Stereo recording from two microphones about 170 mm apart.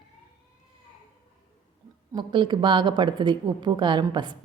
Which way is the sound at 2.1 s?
25° right (ahead or behind).